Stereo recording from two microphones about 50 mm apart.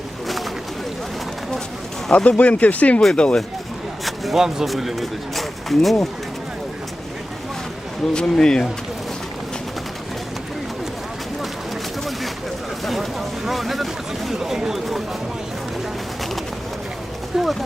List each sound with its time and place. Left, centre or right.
2.1 s speech: left
3.2 s speech: centre
4.0 s speech: centre
8.1 s speech: centre
12.8 s a sound: centre
17.3 s a sound: centre